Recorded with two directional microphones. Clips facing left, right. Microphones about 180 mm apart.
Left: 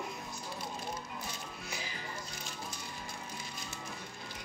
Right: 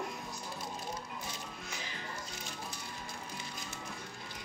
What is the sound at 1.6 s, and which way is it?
Music, 10° left (ahead or behind).